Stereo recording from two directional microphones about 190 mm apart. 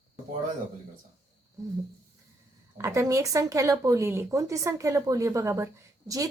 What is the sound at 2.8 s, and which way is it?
A woman's voice, 15° right (ahead or behind).